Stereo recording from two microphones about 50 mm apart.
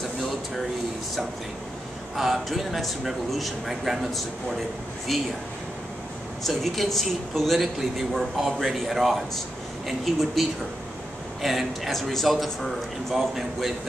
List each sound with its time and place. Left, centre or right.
2.1 s speech: centre
6.4 s speech: centre